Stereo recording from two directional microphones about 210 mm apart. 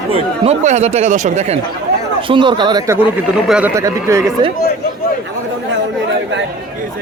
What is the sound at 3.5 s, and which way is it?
Speech, 5° right (ahead or behind).